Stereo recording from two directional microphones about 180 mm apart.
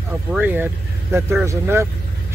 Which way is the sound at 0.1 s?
10° right (ahead or behind).